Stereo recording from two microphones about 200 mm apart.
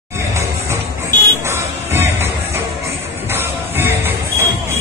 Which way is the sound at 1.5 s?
10° right (ahead or behind).